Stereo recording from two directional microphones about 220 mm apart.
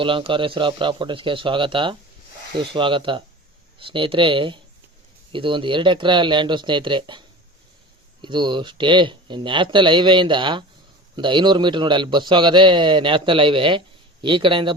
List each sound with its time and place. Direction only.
0.0 s a man's voice: 25° right (ahead or behind)